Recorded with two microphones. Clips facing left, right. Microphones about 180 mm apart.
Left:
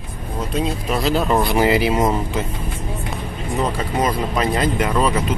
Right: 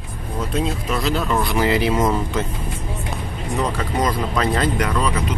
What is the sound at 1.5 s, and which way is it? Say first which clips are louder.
Speech: left 2 dB; 15° left (ahead or behind).